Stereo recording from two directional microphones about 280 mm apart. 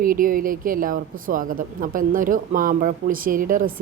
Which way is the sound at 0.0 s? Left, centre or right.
Right.